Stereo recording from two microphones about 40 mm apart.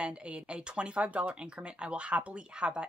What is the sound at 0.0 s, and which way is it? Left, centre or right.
Speech, right.